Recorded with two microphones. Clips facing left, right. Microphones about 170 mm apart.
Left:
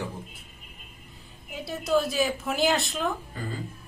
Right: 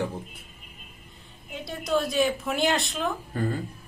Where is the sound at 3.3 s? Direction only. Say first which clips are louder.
Right 7 dB; 60° right (ahead or behind).